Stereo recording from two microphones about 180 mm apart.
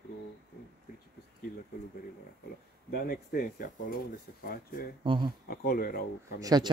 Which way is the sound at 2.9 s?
55° left (ahead or behind).